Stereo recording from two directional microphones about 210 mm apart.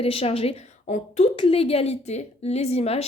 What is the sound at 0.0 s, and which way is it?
A woman's voice, 30° left (ahead or behind).